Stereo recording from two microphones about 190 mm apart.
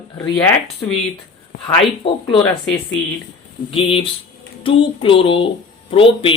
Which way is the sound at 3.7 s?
30° left (ahead or behind).